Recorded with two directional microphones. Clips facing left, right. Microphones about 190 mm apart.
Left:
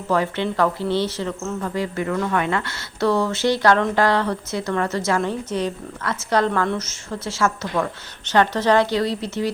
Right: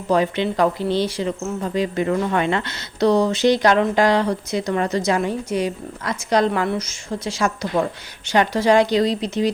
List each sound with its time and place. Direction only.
0.1 s speech: 15° right (ahead or behind)